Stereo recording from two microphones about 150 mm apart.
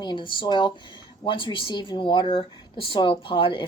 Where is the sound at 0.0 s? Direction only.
30° left (ahead or behind).